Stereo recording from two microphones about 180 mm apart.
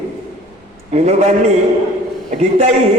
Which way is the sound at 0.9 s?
35° right (ahead or behind).